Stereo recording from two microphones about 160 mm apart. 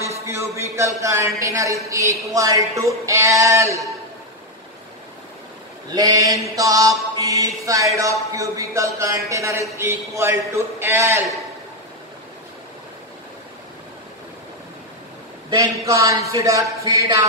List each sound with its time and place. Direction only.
0.3 s mantra: 20° right (ahead or behind)
5.9 s mantra: 25° right (ahead or behind)
15.5 s mantra: 20° right (ahead or behind)